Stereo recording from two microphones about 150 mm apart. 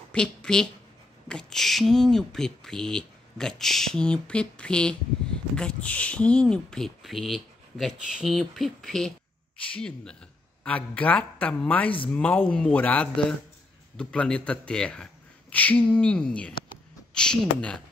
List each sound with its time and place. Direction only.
0.1 s a woman's voice: 5° left (ahead or behind)